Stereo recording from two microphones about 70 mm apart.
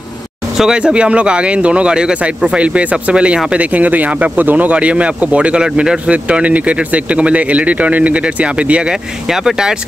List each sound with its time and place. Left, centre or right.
0.6 s speech: centre